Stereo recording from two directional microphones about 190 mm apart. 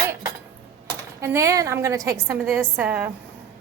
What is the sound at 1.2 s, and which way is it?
A woman's voice, 15° right (ahead or behind).